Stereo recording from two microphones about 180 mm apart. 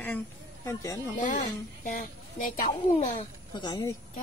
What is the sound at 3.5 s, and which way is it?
Speech, 25° left (ahead or behind).